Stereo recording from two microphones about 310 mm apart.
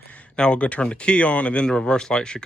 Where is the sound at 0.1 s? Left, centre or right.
Centre.